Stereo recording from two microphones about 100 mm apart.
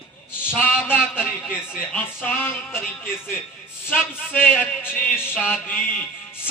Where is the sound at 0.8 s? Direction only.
20° left (ahead or behind).